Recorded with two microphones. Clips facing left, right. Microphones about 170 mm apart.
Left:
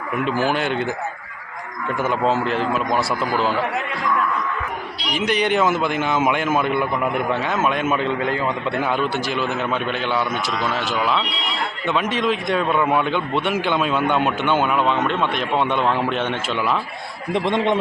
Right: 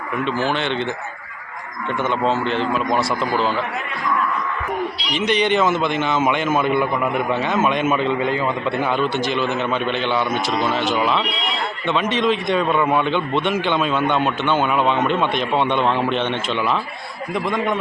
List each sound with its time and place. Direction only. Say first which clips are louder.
0.3 s speech: left 1 dB; 5° left (ahead or behind)
2.0 s speech: even; 5° left (ahead or behind)
5.1 s a man's voice: right 1 dB; 5° left (ahead or behind)
17.3 s a man's voice: left 2 dB; 25° left (ahead or behind)